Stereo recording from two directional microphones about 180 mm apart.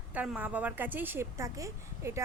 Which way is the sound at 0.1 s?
10° right (ahead or behind).